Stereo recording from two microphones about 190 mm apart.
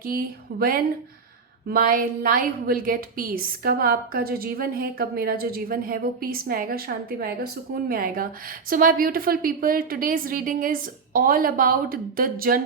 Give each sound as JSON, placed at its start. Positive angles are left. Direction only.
{"t": 1.6, "sound": "a woman's voice", "side_deg": -50}